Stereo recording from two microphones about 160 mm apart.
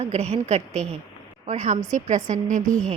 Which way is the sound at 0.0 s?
40° right (ahead or behind).